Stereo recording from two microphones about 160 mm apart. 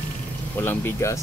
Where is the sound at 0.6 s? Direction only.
15° left (ahead or behind).